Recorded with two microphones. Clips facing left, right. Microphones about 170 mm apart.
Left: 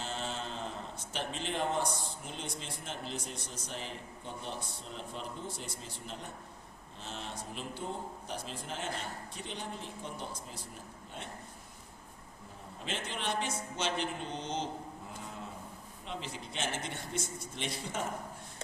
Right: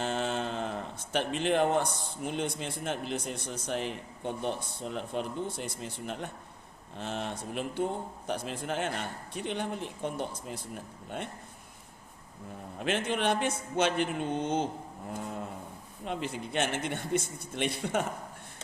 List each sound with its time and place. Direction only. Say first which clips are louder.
0.0 s a man's voice: right 8 dB; 60° right (ahead or behind)
12.8 s a man's voice: right 9 dB; 60° right (ahead or behind)
15.1 s a sound: right 11 dB; 55° right (ahead or behind)
16.0 s a man's voice: right 7 dB; 55° right (ahead or behind)